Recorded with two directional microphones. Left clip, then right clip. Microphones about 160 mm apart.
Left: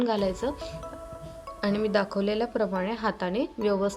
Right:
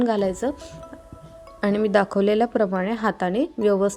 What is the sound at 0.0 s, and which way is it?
A woman's voice, 40° right (ahead or behind).